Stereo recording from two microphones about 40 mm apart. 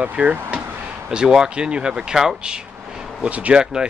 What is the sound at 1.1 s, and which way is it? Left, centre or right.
Speech, centre.